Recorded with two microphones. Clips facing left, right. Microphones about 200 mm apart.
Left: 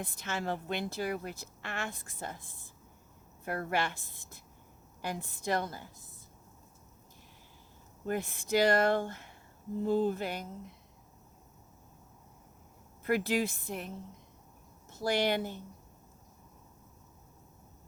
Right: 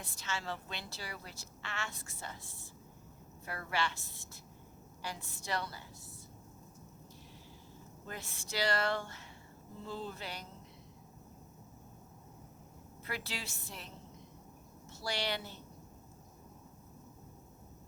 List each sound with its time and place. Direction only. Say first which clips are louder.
0.0 s a woman's voice: left 6 dB; 55° left (ahead or behind)
3.4 s a woman's voice: left 5 dB; 50° left (ahead or behind)
8.0 s a woman's voice: left 13 dB; 55° left (ahead or behind)
13.1 s a woman's voice: left 13 dB; 50° left (ahead or behind)
15.0 s a woman's voice: left 9 dB; 50° left (ahead or behind)